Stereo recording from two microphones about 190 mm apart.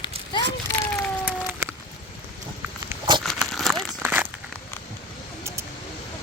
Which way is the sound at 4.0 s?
10° right (ahead or behind).